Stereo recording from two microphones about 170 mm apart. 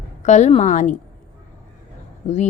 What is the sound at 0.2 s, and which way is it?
Speech, 45° left (ahead or behind).